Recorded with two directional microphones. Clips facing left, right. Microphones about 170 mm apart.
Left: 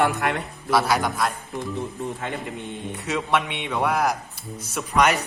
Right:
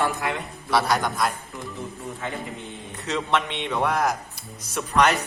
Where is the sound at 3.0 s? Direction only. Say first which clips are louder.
Left 1 dB; 10° left (ahead or behind).